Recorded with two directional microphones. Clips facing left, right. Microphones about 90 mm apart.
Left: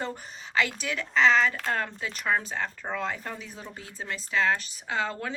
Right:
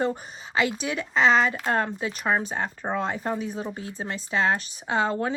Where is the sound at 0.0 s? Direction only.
20° right (ahead or behind).